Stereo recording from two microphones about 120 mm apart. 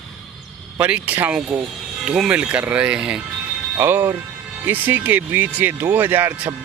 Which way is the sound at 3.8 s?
20° right (ahead or behind).